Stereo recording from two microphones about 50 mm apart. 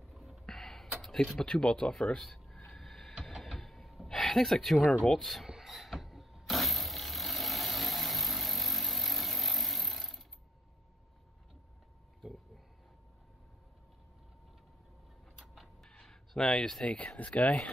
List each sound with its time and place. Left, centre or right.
0.1 s a sound: centre
5.2 s rub: centre
5.5 s vehicle: centre
15.4 s vehicle: centre
15.9 s a sound: centre
16.8 s speech: left